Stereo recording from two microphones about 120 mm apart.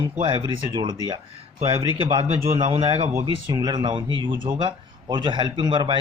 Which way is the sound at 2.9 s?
25° right (ahead or behind).